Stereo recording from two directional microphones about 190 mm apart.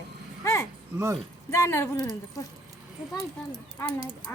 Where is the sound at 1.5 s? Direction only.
15° left (ahead or behind).